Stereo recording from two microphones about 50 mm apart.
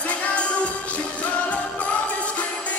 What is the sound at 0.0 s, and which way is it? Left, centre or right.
Music, left.